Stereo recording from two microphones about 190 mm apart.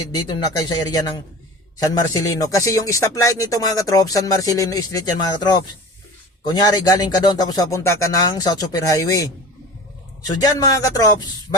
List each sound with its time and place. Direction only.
0.3 s a man's voice: 20° left (ahead or behind)